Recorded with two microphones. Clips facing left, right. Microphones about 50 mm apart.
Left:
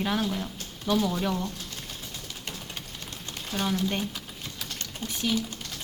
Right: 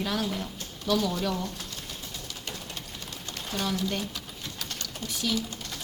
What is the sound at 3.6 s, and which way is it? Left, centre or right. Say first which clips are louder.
Speech: left 2 dB; left.